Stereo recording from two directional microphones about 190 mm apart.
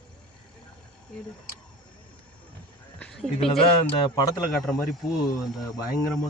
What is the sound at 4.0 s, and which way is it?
Speech, 20° left (ahead or behind).